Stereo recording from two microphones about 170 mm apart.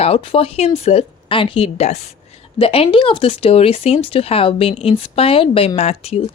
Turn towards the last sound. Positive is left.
turn(degrees=35)  # may be behind; listen again after turning